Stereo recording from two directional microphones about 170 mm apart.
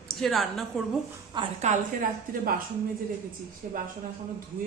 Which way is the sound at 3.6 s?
50° right (ahead or behind).